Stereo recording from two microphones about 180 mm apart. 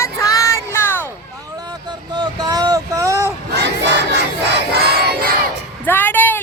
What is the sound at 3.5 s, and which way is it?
Crowd, 70° right (ahead or behind).